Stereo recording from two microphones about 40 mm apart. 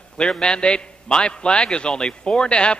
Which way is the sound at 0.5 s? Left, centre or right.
Left.